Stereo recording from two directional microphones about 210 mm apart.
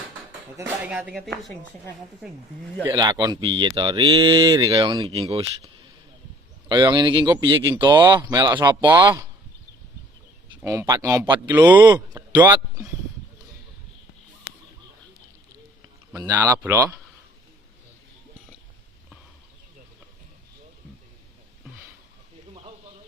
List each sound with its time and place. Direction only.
0.5 s speech: 10° right (ahead or behind)
2.8 s speech: 20° right (ahead or behind)
6.7 s speech: 20° right (ahead or behind)
10.6 s speech: 10° right (ahead or behind)
11.8 s speech: 20° right (ahead or behind)
16.1 s speech: 15° right (ahead or behind)